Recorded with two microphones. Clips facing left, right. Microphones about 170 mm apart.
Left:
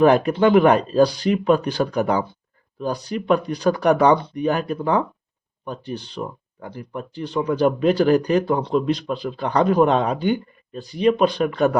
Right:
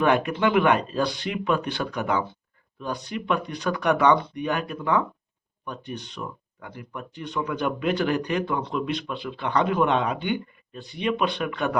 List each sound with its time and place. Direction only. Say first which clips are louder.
0.0 s speech: left 6 dB; 35° left (ahead or behind)